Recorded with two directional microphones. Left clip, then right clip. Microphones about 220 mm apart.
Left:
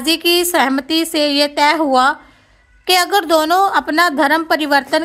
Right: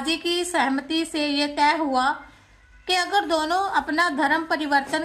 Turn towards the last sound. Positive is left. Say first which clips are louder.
# left 8 dB
turn(degrees=45)  # may be behind; listen again after turning